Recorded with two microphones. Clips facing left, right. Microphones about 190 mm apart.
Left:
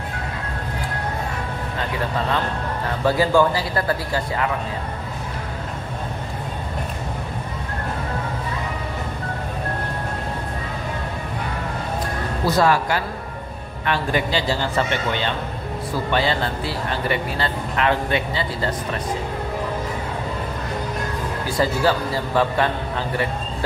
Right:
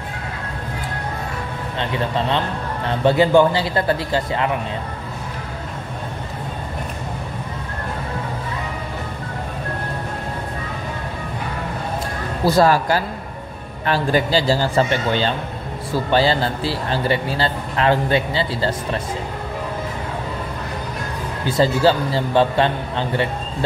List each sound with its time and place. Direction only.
3.0 s a man's voice: 25° right (ahead or behind)
12.4 s speech: 35° right (ahead or behind)
21.5 s a man's voice: 25° right (ahead or behind)